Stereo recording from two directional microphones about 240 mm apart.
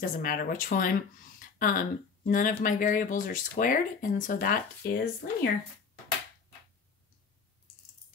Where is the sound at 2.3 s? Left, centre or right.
Left.